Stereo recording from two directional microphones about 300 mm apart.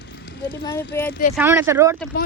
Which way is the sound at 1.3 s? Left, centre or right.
Centre.